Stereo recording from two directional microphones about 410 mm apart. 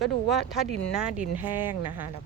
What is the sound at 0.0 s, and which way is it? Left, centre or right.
Speech, centre.